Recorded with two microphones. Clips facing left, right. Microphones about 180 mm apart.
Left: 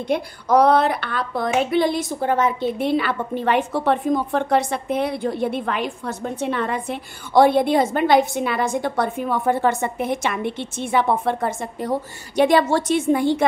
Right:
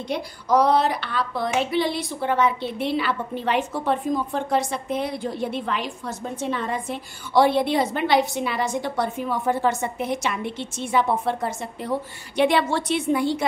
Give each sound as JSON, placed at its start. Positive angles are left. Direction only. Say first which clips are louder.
{"t": 0.1, "sound": "speech", "louder": "left 3 dB", "side_deg": 60}
{"t": 12.4, "sound": "a woman's voice", "louder": "left 4 dB", "side_deg": 40}